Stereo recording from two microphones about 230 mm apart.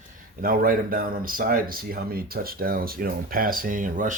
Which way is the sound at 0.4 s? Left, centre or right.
Right.